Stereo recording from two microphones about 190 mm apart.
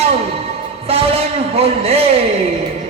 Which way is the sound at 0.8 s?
30° right (ahead or behind).